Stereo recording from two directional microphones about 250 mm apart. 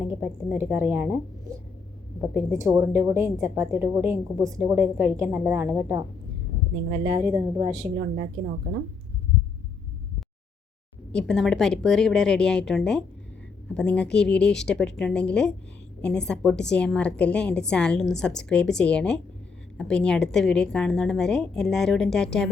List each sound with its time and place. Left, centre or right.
0.0 s a woman's voice: centre
7.1 s a woman's voice: centre
7.9 s speech: right
11.1 s a woman's voice: centre